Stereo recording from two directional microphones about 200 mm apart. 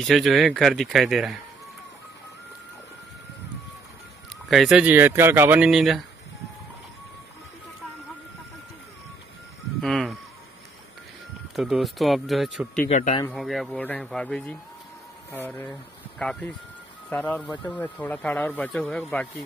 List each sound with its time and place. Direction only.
0.0 s speech: centre (ahead or behind)
4.5 s speech: centre (ahead or behind)
9.8 s speech: centre (ahead or behind)
11.5 s speech: centre (ahead or behind)
12.9 s speech: 35° left (ahead or behind)
13.3 s speech: centre (ahead or behind)